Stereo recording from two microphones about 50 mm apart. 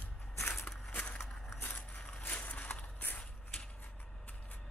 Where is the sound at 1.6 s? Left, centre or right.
Left.